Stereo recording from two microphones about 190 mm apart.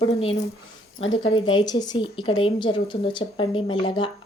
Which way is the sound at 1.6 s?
20° left (ahead or behind).